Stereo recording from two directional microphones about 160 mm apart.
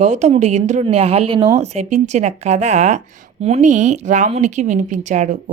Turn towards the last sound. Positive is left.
turn(degrees=-50)  # may be behind; listen again after turning